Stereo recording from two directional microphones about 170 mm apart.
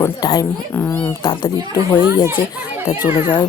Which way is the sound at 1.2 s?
25° left (ahead or behind).